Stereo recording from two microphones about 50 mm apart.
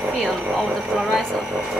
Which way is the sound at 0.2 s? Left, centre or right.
Centre.